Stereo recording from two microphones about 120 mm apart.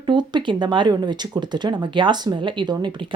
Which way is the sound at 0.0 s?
40° right (ahead or behind).